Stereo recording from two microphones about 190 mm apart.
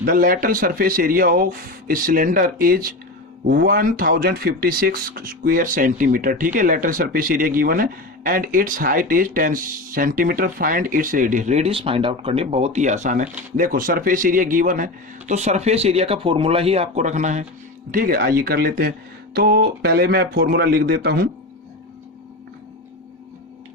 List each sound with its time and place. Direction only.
0.0 s speech: 45° right (ahead or behind)
17.9 s speech: 50° right (ahead or behind)